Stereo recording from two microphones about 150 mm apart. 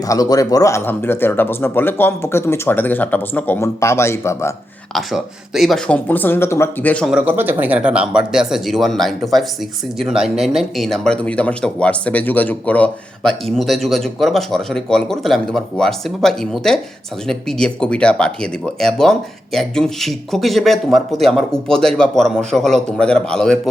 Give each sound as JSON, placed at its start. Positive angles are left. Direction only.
{"t": 0.0, "sound": "speech", "side_deg": 25}
{"t": 4.9, "sound": "speech", "side_deg": 0}
{"t": 7.1, "sound": "speech", "side_deg": -15}